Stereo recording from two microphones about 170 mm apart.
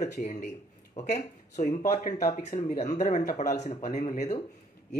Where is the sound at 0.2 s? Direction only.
45° left (ahead or behind).